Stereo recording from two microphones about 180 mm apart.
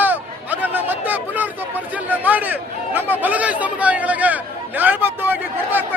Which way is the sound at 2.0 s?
10° right (ahead or behind).